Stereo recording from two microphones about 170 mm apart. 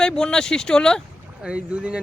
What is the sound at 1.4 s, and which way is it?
Speech, 5° right (ahead or behind).